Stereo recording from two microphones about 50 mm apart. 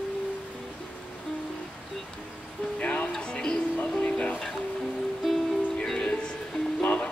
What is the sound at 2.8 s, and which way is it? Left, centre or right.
Music, left.